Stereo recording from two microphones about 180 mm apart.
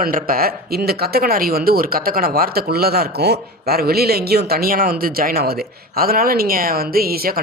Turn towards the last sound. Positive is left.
turn(degrees=-55)  # may be behind; listen again after turning